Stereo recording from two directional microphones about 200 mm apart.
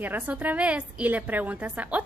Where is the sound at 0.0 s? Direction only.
10° right (ahead or behind).